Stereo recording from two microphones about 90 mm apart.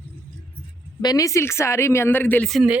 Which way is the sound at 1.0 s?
40° left (ahead or behind).